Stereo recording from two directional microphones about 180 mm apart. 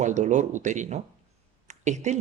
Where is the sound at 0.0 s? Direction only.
40° right (ahead or behind).